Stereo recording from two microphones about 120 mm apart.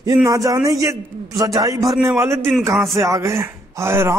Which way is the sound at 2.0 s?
20° right (ahead or behind).